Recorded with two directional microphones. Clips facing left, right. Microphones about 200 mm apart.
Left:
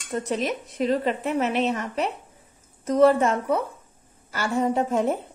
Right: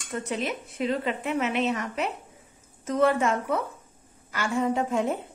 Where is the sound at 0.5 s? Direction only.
40° left (ahead or behind).